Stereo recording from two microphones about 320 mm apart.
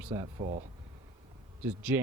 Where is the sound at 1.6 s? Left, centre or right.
Centre.